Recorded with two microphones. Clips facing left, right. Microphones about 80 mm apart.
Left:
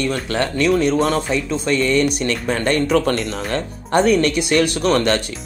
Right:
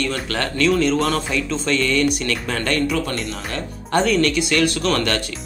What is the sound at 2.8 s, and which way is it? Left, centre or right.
Speech, left.